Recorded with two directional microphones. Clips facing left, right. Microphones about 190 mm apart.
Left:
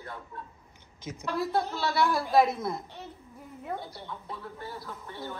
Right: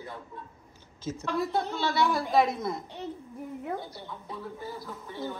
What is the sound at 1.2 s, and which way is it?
Speech, centre (ahead or behind).